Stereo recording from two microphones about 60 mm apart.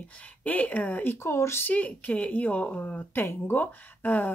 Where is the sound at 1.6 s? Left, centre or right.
Left.